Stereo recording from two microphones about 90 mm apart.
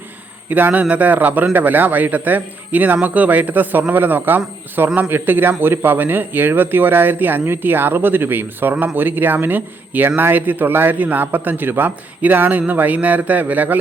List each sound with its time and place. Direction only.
0.5 s a man's voice: 20° right (ahead or behind)